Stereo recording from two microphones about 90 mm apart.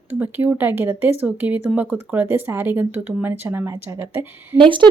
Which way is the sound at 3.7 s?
35° right (ahead or behind).